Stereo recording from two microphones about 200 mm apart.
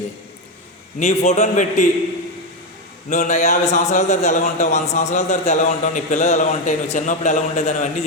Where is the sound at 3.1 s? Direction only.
35° left (ahead or behind).